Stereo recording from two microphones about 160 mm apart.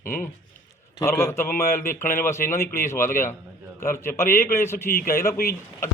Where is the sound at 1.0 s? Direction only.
15° left (ahead or behind).